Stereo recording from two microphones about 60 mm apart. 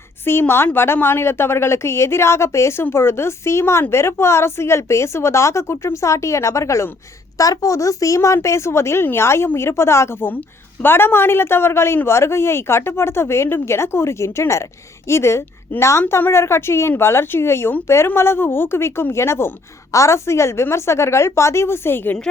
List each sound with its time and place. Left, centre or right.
0.3 s a woman's voice: left
7.3 s a woman's voice: left
10.8 s a woman's voice: left